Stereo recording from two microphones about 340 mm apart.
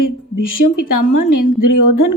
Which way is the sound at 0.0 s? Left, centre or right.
Left.